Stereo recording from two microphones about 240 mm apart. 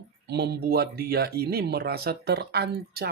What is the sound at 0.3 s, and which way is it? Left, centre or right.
Speech, right.